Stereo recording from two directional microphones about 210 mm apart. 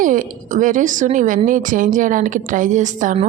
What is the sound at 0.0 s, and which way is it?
A woman's voice, 40° right (ahead or behind).